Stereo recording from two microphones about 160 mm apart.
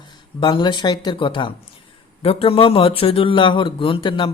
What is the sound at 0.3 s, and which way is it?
Speech, 30° left (ahead or behind).